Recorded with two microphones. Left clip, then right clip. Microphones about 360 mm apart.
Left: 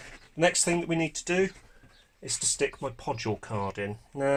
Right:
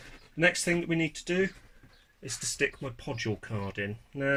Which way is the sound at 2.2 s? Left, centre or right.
Centre.